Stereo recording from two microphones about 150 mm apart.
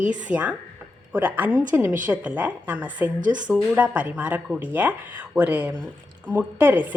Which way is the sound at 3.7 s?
10° right (ahead or behind).